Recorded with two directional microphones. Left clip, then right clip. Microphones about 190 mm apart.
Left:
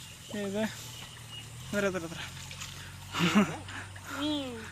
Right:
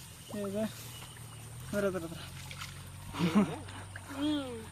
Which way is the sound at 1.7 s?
5° left (ahead or behind).